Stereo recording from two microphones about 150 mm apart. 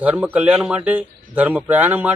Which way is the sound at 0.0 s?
10° right (ahead or behind).